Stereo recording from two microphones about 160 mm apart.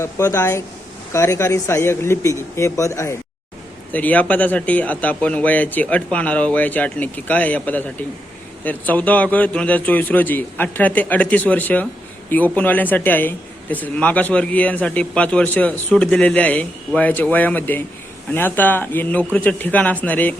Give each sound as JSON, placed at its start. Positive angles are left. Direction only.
{"t": 0.0, "sound": "speech", "side_deg": 20}